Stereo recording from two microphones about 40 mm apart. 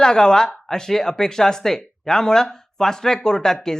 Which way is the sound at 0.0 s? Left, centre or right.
Centre.